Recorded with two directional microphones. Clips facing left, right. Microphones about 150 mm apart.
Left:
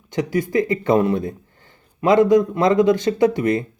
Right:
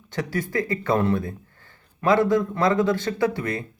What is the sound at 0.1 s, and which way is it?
Speech, 15° left (ahead or behind).